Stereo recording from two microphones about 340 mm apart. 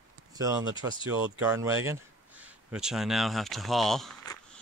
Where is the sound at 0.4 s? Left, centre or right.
Centre.